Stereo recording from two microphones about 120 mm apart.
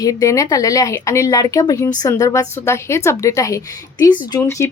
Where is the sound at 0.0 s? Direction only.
30° left (ahead or behind).